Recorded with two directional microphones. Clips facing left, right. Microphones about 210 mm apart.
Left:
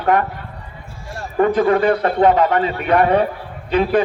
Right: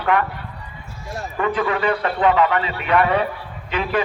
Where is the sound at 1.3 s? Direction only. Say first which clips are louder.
Left 7 dB; 40° left (ahead or behind).